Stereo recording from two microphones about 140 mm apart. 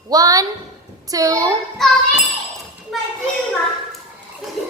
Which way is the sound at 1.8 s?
Centre (ahead or behind).